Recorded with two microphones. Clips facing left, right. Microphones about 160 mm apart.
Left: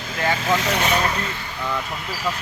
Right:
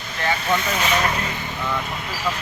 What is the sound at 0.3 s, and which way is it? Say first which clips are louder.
Speech: left 1 dB; 90° left.